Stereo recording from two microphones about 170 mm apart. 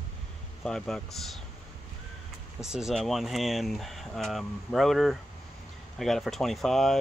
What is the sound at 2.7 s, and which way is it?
Speech, 5° right (ahead or behind).